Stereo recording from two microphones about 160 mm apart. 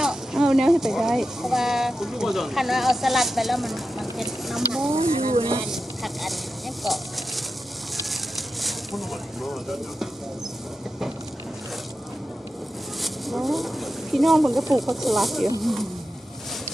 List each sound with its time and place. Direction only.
0.0 s speech: 5° right (ahead or behind)
4.9 s speech: 40° right (ahead or behind)
5.6 s speech: centre (ahead or behind)
6.8 s a sound: centre (ahead or behind)
13.0 s speech: centre (ahead or behind)